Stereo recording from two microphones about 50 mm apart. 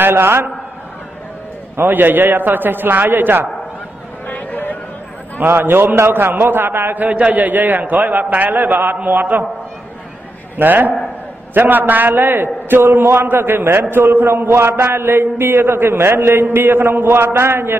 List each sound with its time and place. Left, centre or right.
0.0 s a man's voice: right
1.9 s a man's voice: right
4.3 s a sound: left
5.4 s a man's voice: right
7.1 s a man's voice: right
10.6 s a man's voice: right